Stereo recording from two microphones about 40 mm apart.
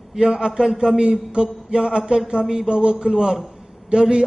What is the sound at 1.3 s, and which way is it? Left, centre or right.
Speech, right.